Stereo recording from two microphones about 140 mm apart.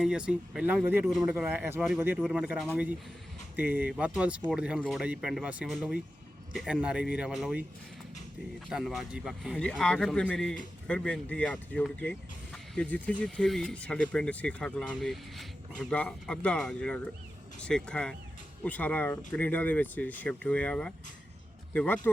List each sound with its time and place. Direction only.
0.0 s speech: 5° right (ahead or behind)
8.7 s speech: centre (ahead or behind)
9.6 s speech: 5° left (ahead or behind)